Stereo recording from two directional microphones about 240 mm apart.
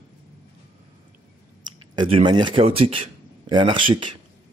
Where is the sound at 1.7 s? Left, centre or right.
Right.